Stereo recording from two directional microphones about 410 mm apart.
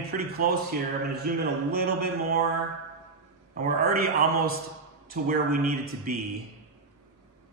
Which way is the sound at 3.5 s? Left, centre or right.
Right.